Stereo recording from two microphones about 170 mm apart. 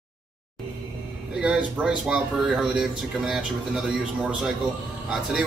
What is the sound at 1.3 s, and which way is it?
Speech, 5° right (ahead or behind).